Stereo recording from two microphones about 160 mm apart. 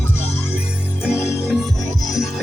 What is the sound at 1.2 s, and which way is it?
Music, 15° left (ahead or behind).